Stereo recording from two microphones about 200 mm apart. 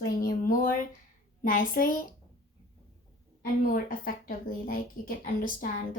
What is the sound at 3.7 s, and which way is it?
A woman's voice, 45° left (ahead or behind).